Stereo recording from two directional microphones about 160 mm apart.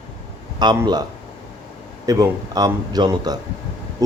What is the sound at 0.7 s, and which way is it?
Speech, 25° right (ahead or behind).